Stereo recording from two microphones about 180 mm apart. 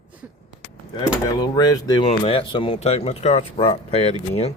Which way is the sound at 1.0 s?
25° left (ahead or behind).